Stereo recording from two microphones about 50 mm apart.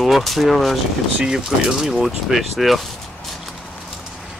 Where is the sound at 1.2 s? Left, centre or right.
Centre.